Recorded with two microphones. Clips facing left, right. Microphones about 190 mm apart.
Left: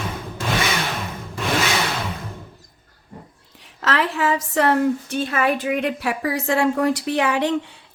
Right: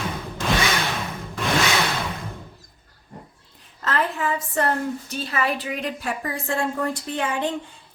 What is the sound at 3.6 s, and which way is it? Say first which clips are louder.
A woman's voice: left 3 dB; 80° left.